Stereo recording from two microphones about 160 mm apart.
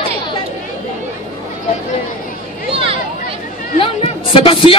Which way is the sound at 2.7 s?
35° right (ahead or behind).